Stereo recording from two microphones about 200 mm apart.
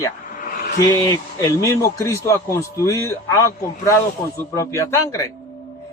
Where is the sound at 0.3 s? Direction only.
45° left (ahead or behind).